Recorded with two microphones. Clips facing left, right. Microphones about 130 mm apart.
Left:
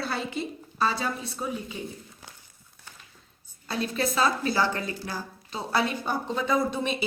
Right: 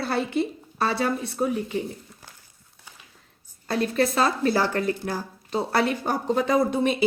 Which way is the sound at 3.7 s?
55° right (ahead or behind).